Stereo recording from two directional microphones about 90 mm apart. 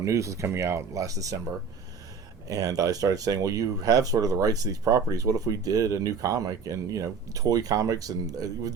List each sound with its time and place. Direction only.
0.0 s speech: 35° right (ahead or behind)
2.5 s speech: 45° right (ahead or behind)